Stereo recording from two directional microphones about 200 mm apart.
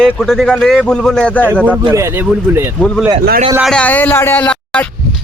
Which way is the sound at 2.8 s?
5° left (ahead or behind).